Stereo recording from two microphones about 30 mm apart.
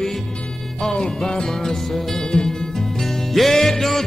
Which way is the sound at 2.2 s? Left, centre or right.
Left.